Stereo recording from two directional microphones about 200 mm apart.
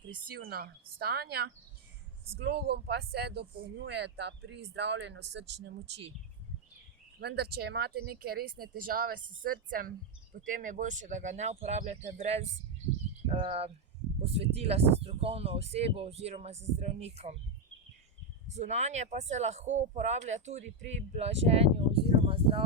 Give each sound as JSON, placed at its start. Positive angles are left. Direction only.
{"t": 0.4, "sound": "speech", "side_deg": -50}
{"t": 7.2, "sound": "speech", "side_deg": -55}
{"t": 18.5, "sound": "speech", "side_deg": -35}